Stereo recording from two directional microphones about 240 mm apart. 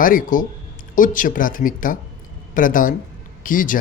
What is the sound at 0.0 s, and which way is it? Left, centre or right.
Speech, left.